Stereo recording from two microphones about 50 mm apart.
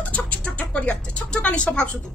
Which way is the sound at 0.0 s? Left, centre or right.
Left.